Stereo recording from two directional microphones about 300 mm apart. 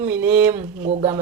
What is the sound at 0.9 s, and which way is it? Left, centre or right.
Speech, right.